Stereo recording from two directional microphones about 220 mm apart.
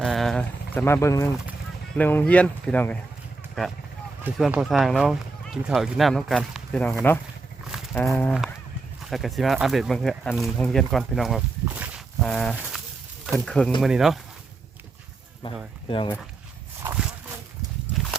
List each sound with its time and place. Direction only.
0.0 s a sound: centre (ahead or behind)
2.0 s speech: 10° left (ahead or behind)
7.9 s speech: 10° left (ahead or behind)
15.4 s speech: 25° left (ahead or behind)